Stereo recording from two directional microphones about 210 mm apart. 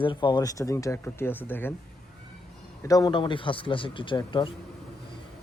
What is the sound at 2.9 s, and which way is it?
A man's voice, 20° left (ahead or behind).